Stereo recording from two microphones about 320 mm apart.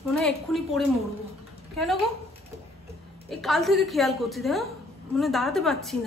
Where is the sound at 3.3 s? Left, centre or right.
Centre.